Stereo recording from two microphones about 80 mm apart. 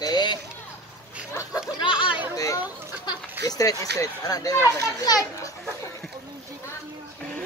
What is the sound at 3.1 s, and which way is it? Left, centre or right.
Speech, left.